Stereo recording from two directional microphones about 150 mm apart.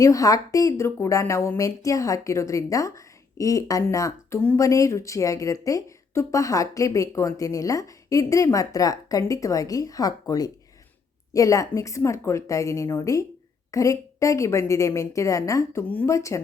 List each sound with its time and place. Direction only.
0.0 s a woman's voice: 20° left (ahead or behind)